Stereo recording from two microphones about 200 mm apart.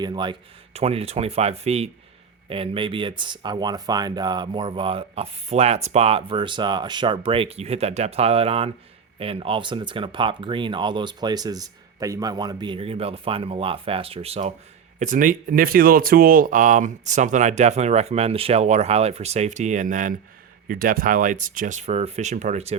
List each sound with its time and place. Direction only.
0.0 s speech: 20° right (ahead or behind)